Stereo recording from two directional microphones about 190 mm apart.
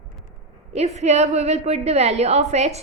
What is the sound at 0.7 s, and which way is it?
A woman's voice, 35° right (ahead or behind).